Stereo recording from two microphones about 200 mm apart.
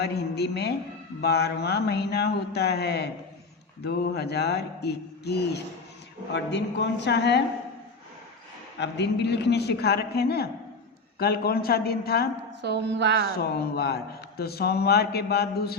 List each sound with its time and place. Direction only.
0.0 s speech: 55° left (ahead or behind)
8.8 s a man's voice: 60° left (ahead or behind)
12.6 s a woman's voice: 60° right (ahead or behind)
13.3 s a man's voice: 50° left (ahead or behind)